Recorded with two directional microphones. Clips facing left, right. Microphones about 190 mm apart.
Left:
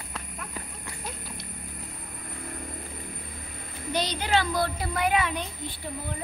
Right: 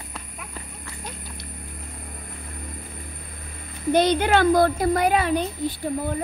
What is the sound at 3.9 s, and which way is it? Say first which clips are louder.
A child's voice: right 8 dB; 55° right (ahead or behind).